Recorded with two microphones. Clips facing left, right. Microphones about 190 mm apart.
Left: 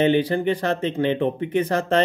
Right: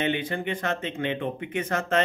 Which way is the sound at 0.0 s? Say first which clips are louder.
Left 9 dB; 35° left (ahead or behind).